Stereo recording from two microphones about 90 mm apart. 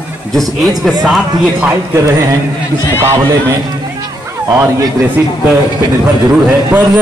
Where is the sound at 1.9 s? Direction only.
35° right (ahead or behind).